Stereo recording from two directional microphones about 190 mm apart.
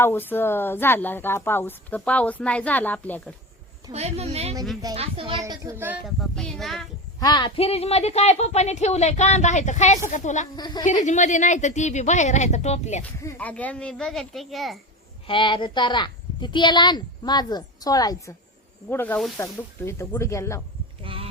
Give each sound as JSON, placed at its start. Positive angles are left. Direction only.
{"t": 0.0, "sound": "a woman's voice", "side_deg": 10}
{"t": 3.9, "sound": "a woman's voice", "side_deg": -35}
{"t": 6.1, "sound": "speech", "side_deg": 0}
{"t": 7.2, "sound": "speech", "side_deg": 20}
{"t": 10.5, "sound": "a woman's voice", "side_deg": 20}
{"t": 10.8, "sound": "speech", "side_deg": 40}
{"t": 13.2, "sound": "speech", "side_deg": 10}
{"t": 15.3, "sound": "a woman's voice", "side_deg": 25}
{"t": 21.0, "sound": "speech", "side_deg": -30}